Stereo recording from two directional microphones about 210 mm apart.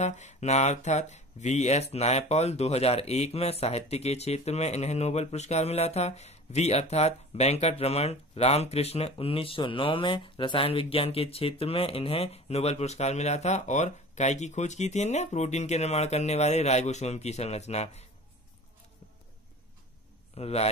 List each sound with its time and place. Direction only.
0.0 s speech: 35° left (ahead or behind)
20.3 s a man's voice: 30° left (ahead or behind)